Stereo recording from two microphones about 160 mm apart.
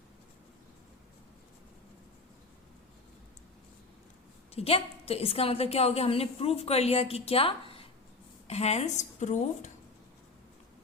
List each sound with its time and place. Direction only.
4.5 s a woman's voice: 40° left (ahead or behind)